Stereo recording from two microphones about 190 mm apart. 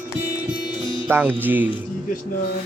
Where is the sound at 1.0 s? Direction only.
10° right (ahead or behind).